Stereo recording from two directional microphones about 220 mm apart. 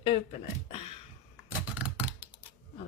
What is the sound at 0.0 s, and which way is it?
Speech, 25° left (ahead or behind).